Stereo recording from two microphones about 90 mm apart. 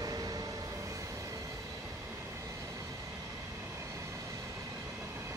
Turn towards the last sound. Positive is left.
turn(degrees=-30)  # may be behind; listen again after turning